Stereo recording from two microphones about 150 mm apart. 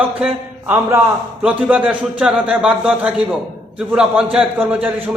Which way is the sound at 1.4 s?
10° right (ahead or behind).